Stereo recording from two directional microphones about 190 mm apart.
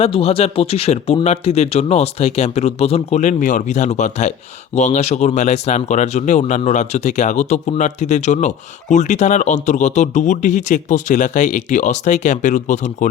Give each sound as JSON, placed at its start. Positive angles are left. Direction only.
{"t": 0.0, "sound": "speech", "side_deg": 30}